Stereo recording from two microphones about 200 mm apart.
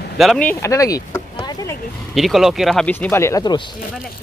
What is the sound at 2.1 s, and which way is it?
Speech, centre (ahead or behind).